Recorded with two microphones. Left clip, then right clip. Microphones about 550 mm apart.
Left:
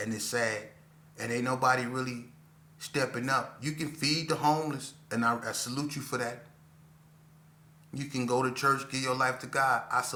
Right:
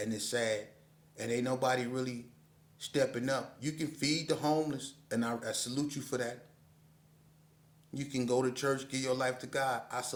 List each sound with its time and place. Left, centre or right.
0.0 s a man's voice: right
7.9 s a man's voice: right